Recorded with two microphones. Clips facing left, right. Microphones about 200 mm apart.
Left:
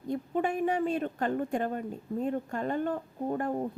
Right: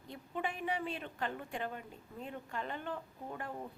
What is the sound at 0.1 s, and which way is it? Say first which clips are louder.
Speech: left 11 dB; 45° left (ahead or behind).